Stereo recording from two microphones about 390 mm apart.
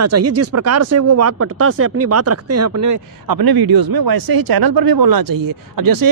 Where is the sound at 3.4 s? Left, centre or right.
Right.